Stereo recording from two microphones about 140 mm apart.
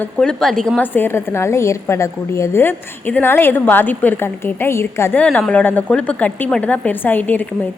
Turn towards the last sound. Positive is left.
turn(degrees=10)  # may be behind; listen again after turning